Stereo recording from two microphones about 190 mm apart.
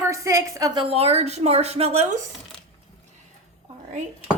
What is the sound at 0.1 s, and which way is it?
A woman's voice, 15° right (ahead or behind).